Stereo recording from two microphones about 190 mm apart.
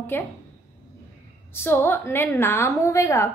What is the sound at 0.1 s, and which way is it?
Speech, 10° left (ahead or behind).